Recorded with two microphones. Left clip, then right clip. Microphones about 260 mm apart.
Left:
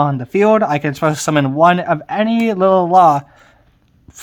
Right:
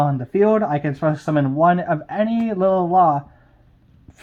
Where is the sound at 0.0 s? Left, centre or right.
Centre.